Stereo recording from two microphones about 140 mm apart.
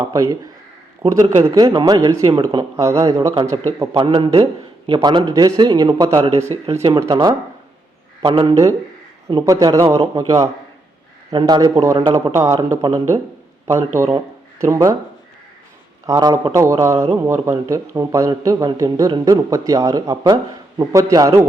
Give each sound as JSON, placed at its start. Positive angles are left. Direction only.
{"t": 0.1, "sound": "speech", "side_deg": -25}
{"t": 3.9, "sound": "a man's voice", "side_deg": -40}
{"t": 8.2, "sound": "a man's voice", "side_deg": -35}
{"t": 16.0, "sound": "speech", "side_deg": -25}